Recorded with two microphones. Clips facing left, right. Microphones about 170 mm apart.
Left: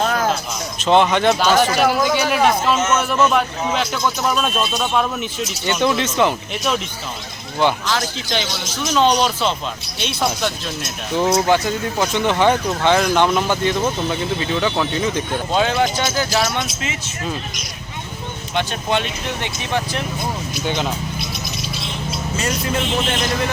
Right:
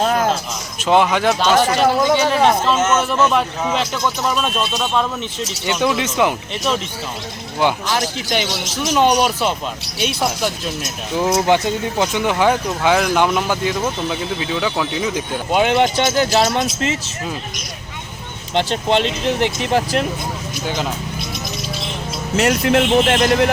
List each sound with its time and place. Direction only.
0.0 s a sound: 30° right (ahead or behind)
0.8 s a man's voice: 5° right (ahead or behind)
1.9 s speech: 25° right (ahead or behind)
3.0 s a man's voice: centre (ahead or behind)
5.6 s speech: 10° right (ahead or behind)
7.6 s speech: 15° right (ahead or behind)
11.4 s speech: 20° right (ahead or behind)
12.2 s speech: 10° right (ahead or behind)
15.6 s speech: 25° right (ahead or behind)
18.5 s speech: 30° right (ahead or behind)
20.7 s a man's voice: 5° right (ahead or behind)
22.4 s speech: 70° right (ahead or behind)